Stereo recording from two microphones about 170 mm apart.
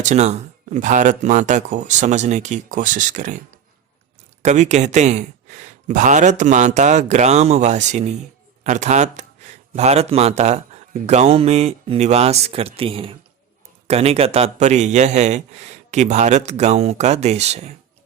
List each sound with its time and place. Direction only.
0.0 s speech: 45° right (ahead or behind)
4.4 s a man's voice: 45° right (ahead or behind)